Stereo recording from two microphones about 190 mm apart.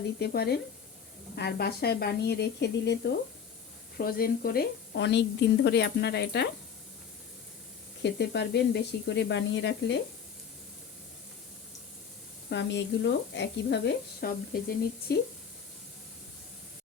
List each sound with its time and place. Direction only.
0.2 s a woman's voice: 60° left (ahead or behind)
3.9 s a woman's voice: 50° left (ahead or behind)
8.0 s speech: 65° left (ahead or behind)
12.5 s a woman's voice: 65° left (ahead or behind)